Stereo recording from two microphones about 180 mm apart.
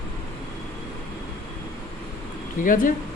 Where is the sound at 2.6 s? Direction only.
50° left (ahead or behind).